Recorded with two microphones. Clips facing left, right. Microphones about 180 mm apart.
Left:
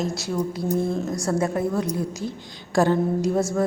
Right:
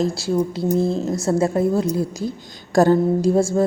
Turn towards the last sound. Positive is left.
turn(degrees=-30)  # may be behind; listen again after turning